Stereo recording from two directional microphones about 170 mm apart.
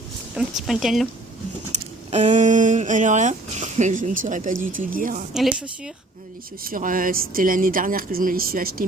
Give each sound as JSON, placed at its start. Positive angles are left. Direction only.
{"t": 0.3, "sound": "speech", "side_deg": 0}
{"t": 1.7, "sound": "speech", "side_deg": -45}
{"t": 5.3, "sound": "speech", "side_deg": 0}
{"t": 6.6, "sound": "speech", "side_deg": -55}